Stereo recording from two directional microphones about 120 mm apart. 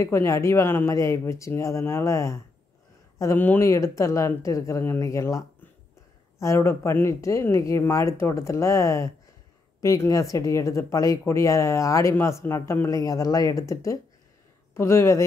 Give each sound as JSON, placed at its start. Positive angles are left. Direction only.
{"t": 0.0, "sound": "speech", "side_deg": 25}
{"t": 6.4, "sound": "speech", "side_deg": 25}